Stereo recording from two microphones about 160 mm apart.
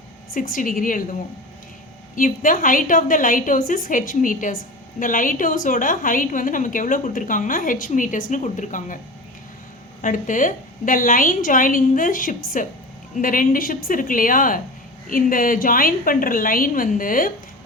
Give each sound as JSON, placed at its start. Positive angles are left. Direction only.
{"t": 0.3, "sound": "a woman's voice", "side_deg": 60}
{"t": 2.1, "sound": "a woman's voice", "side_deg": 55}
{"t": 10.0, "sound": "a woman's voice", "side_deg": 55}